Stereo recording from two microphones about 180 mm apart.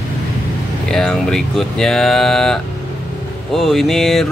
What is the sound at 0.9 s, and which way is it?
Speech, 5° left (ahead or behind).